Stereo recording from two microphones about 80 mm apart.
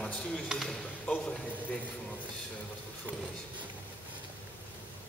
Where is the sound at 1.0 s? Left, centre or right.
Centre.